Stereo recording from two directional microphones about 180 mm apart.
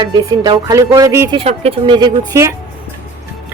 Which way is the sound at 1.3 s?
30° right (ahead or behind).